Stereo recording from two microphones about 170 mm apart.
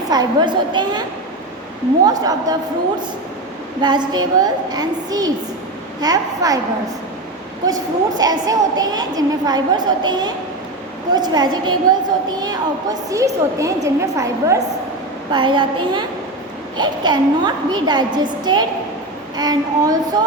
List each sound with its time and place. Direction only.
0.1 s a woman's voice: 25° right (ahead or behind)
2.0 s a woman's voice: 25° right (ahead or behind)
3.8 s a woman's voice: 25° right (ahead or behind)
8.2 s a woman's voice: 20° right (ahead or behind)